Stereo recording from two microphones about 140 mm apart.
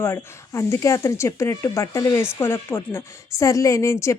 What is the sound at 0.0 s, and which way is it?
A woman's voice, 15° left (ahead or behind).